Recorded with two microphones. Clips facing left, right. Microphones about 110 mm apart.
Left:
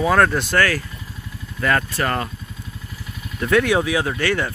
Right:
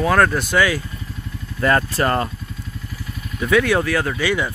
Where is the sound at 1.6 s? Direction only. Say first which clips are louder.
Right 3 dB; 30° right (ahead or behind).